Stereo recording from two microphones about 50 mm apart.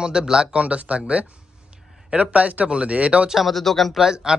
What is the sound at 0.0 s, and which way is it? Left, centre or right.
Speech, centre.